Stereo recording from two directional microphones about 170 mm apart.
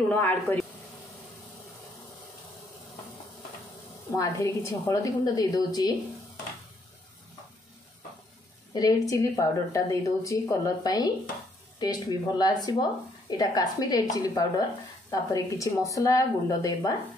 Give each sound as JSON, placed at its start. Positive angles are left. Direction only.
{"t": 0.1, "sound": "speech", "side_deg": 10}
{"t": 4.2, "sound": "speech", "side_deg": 15}
{"t": 8.7, "sound": "speech", "side_deg": 20}